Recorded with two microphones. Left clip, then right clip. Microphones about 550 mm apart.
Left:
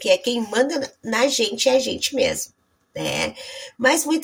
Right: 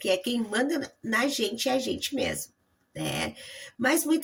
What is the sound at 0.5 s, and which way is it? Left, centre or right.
Speech, right.